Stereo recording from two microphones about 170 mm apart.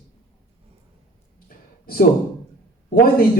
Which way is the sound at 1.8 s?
60° left (ahead or behind).